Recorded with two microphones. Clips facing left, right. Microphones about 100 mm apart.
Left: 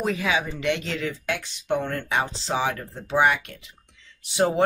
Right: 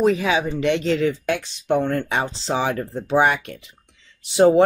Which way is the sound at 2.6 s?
25° right (ahead or behind).